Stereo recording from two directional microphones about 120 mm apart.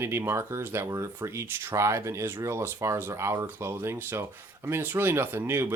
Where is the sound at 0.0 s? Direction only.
20° right (ahead or behind).